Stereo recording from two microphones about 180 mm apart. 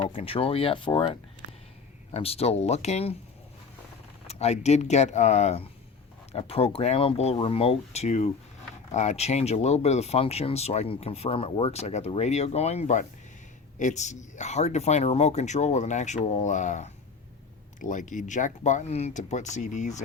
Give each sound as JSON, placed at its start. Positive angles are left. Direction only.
{"t": 0.0, "sound": "speech", "side_deg": 30}
{"t": 4.3, "sound": "speech", "side_deg": 35}